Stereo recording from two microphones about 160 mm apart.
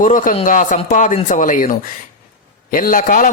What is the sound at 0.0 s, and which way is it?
A man's voice, 55° left (ahead or behind).